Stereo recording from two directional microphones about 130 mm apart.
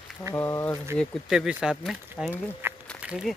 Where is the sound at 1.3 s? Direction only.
5° right (ahead or behind).